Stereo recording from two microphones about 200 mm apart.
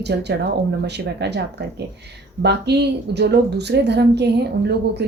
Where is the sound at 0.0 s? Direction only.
55° right (ahead or behind).